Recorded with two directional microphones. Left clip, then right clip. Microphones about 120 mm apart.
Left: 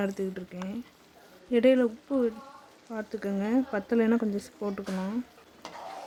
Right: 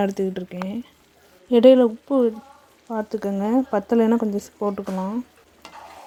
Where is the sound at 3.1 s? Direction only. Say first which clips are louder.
Right 6 dB; 20° right (ahead or behind).